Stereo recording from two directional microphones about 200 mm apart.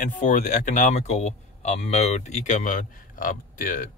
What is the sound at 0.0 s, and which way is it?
Speech, 40° left (ahead or behind).